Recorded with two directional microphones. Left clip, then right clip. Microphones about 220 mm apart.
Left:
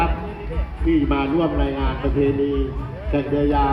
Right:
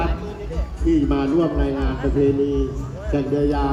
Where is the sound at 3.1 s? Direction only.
65° right (ahead or behind).